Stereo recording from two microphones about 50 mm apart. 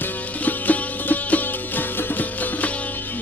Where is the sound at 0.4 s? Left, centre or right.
Left.